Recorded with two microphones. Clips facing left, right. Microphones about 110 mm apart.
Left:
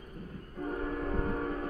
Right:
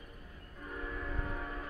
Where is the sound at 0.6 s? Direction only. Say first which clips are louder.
Left 8 dB; 45° left (ahead or behind).